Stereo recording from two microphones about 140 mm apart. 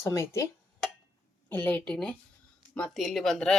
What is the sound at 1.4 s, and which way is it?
A woman's voice, 10° left (ahead or behind).